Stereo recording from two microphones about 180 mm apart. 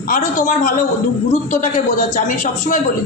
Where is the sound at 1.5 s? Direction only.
45° left (ahead or behind).